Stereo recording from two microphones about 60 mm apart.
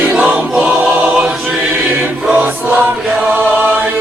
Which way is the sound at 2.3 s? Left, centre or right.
Right.